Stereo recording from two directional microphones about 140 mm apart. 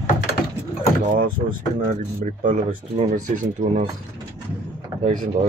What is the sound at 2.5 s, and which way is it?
Speech, 45° right (ahead or behind).